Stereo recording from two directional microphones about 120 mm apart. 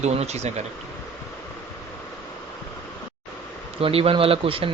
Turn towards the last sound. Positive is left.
turn(degrees=-50)  # may be behind; listen again after turning